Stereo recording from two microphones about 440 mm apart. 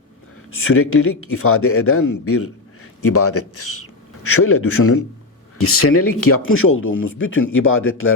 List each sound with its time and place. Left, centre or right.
0.6 s a man's voice: left